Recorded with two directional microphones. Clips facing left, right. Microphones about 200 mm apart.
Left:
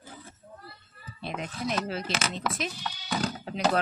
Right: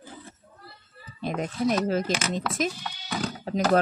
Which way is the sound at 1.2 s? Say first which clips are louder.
Right 7 dB; 45° right (ahead or behind).